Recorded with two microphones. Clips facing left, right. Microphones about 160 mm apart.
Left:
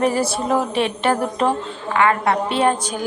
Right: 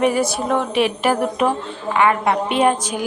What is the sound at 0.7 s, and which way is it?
Speech, 30° left (ahead or behind).